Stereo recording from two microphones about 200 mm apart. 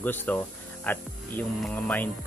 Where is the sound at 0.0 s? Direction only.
10° left (ahead or behind).